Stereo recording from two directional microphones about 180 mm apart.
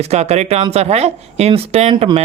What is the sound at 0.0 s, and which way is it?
Speech, 35° right (ahead or behind).